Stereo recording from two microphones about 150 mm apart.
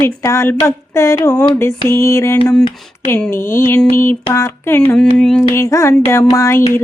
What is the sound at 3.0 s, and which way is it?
Speech, 10° left (ahead or behind).